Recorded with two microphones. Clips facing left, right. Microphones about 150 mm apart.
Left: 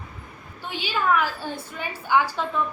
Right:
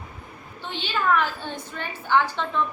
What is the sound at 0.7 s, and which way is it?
A woman's voice, 10° left (ahead or behind).